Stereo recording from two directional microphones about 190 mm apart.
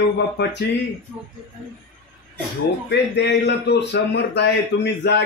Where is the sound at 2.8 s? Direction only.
60° left (ahead or behind).